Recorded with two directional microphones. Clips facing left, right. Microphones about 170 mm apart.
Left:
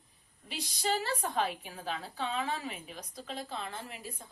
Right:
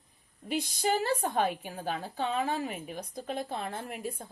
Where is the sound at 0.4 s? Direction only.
50° right (ahead or behind).